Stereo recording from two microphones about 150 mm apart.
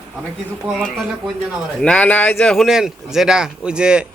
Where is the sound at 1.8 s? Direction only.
5° left (ahead or behind).